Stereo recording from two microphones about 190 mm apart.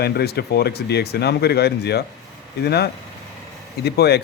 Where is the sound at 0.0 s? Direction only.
55° left (ahead or behind).